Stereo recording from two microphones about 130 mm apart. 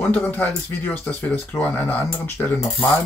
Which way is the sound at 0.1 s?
15° left (ahead or behind).